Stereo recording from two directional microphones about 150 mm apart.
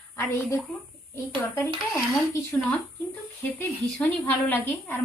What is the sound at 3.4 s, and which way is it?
A woman's voice, 20° left (ahead or behind).